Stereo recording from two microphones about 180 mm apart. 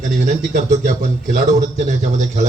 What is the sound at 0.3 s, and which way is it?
A man's voice, 45° right (ahead or behind).